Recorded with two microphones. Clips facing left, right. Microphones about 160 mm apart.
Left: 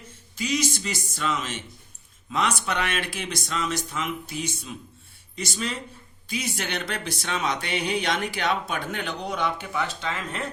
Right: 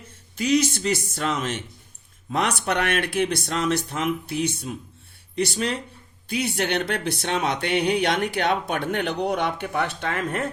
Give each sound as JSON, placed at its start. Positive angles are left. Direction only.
{"t": 0.3, "sound": "speech", "side_deg": -60}